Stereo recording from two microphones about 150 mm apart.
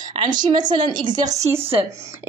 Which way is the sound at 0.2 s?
30° right (ahead or behind).